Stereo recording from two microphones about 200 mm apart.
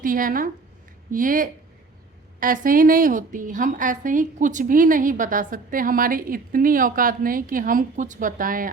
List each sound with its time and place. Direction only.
0.0 s a woman's voice: 45° right (ahead or behind)